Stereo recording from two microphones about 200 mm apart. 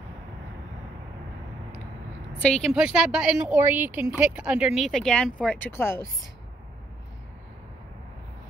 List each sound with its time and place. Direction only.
2.6 s speech: 5° right (ahead or behind)